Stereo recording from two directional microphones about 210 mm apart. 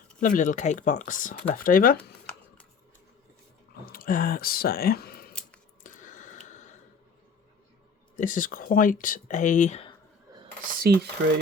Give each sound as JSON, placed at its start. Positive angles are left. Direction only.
{"t": 0.2, "sound": "speech", "side_deg": 40}
{"t": 3.9, "sound": "speech", "side_deg": 40}
{"t": 5.8, "sound": "a sound", "side_deg": 35}
{"t": 8.1, "sound": "speech", "side_deg": 40}
{"t": 10.8, "sound": "speech", "side_deg": -45}